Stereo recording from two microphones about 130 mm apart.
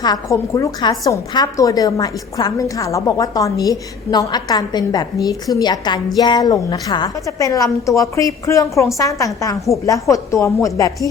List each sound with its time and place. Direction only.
0.0 s a woman's voice: 30° left (ahead or behind)